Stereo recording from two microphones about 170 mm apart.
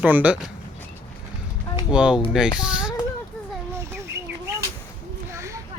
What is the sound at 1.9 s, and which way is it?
Speech, 5° right (ahead or behind).